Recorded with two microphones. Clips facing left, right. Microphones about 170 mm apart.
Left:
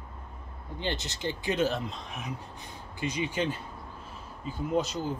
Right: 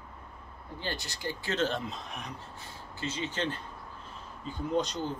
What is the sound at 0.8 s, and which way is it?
Speech, 20° left (ahead or behind).